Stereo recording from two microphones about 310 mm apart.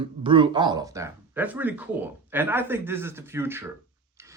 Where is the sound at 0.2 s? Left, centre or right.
Centre.